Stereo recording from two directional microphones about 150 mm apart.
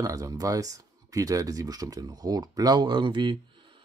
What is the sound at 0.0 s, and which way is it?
Speech, 20° right (ahead or behind).